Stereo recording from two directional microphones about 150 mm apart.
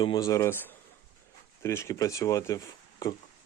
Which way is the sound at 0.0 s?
25° left (ahead or behind).